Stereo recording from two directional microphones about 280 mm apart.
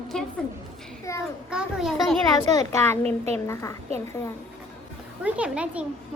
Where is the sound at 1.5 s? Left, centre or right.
Centre.